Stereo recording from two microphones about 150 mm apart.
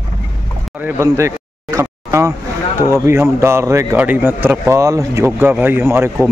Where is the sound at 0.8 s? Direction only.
20° right (ahead or behind).